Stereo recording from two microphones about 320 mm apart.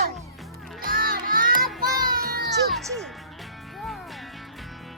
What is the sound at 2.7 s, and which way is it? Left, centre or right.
Music, centre.